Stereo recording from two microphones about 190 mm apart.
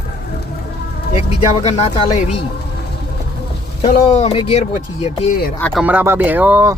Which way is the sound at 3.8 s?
35° left (ahead or behind).